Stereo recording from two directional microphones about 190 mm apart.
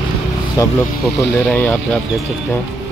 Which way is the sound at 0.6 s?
15° left (ahead or behind).